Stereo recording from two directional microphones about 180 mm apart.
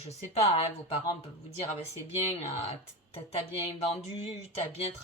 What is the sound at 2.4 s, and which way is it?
Speech, 35° left (ahead or behind).